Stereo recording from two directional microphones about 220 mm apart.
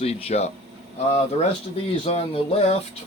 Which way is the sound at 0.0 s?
30° left (ahead or behind).